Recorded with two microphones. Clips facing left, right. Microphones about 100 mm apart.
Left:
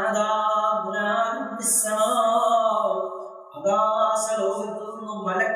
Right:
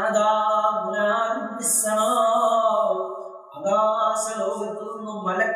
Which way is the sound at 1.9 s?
Centre (ahead or behind).